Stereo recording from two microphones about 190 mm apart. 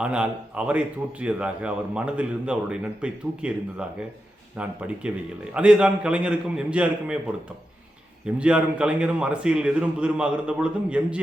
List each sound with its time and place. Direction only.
0.0 s a man's voice: 5° right (ahead or behind)
8.4 s a man's voice: 5° right (ahead or behind)